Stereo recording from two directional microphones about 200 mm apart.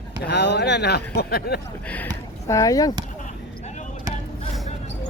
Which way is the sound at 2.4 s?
15° left (ahead or behind).